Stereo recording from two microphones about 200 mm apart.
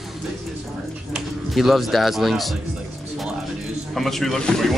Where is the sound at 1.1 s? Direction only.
Centre (ahead or behind).